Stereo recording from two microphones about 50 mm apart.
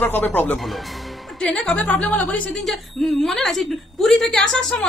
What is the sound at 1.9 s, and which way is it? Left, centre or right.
Speech, left.